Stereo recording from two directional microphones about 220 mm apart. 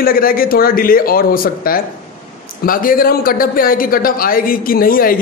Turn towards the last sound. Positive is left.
turn(degrees=40)  # may be behind; listen again after turning